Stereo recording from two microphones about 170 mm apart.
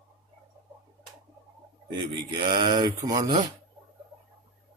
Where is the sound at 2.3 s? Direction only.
25° right (ahead or behind).